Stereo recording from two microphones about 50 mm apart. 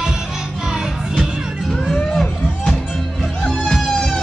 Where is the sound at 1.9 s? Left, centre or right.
Centre.